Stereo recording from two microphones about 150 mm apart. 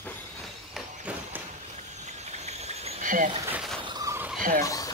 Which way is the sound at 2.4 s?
45° right (ahead or behind).